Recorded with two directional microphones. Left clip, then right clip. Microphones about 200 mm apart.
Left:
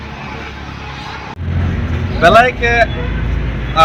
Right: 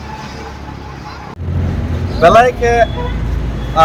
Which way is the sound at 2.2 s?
15° right (ahead or behind).